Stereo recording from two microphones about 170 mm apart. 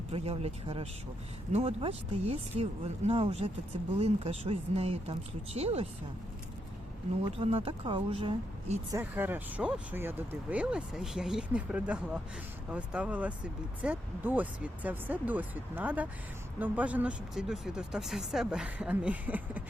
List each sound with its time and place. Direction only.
0.1 s speech: 35° right (ahead or behind)
7.3 s speech: 35° right (ahead or behind)
8.9 s speech: 15° right (ahead or behind)